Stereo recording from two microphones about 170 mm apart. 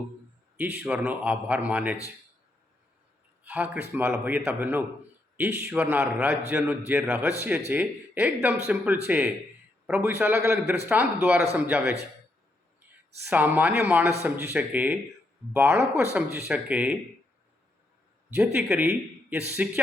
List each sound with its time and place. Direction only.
0.5 s a man's voice: 15° right (ahead or behind)
3.4 s a man's voice: 10° right (ahead or behind)
13.2 s a man's voice: 10° right (ahead or behind)
18.5 s a man's voice: 5° right (ahead or behind)
18.9 s a man's voice: 15° right (ahead or behind)